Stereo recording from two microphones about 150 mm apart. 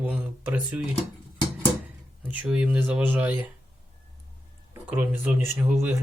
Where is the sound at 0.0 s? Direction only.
10° right (ahead or behind).